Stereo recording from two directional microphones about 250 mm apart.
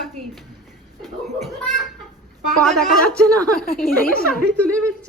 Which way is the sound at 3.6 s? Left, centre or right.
Left.